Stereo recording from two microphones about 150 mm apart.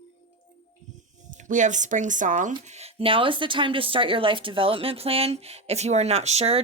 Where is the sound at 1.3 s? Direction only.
55° right (ahead or behind).